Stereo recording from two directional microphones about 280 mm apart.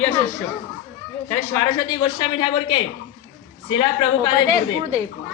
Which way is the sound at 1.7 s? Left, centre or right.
Centre.